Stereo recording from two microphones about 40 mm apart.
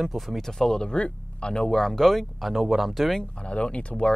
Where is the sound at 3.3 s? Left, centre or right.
Left.